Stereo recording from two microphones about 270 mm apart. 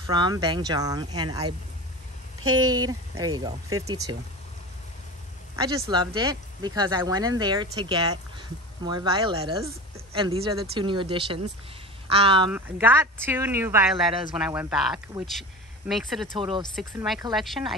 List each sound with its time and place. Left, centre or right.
0.0 s speech: centre
2.7 s speech: centre
5.6 s speech: centre
12.4 s speech: centre
16.3 s speech: centre
16.7 s speech: centre